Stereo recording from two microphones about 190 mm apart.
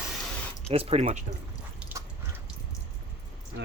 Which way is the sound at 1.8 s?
15° right (ahead or behind).